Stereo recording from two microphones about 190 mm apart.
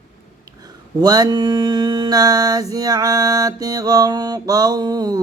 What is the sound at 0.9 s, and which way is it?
Mantra, 20° right (ahead or behind).